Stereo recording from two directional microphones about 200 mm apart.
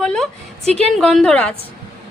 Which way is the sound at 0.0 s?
5° left (ahead or behind).